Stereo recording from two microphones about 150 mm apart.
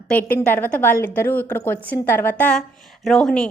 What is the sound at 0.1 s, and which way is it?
A woman's voice, 10° left (ahead or behind).